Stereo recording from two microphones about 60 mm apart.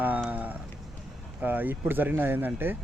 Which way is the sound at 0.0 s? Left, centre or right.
Right.